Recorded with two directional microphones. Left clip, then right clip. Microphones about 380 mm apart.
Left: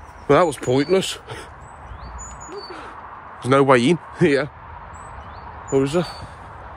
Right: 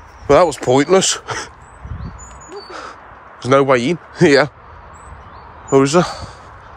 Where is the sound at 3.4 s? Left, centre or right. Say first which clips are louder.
Right 2 dB; centre.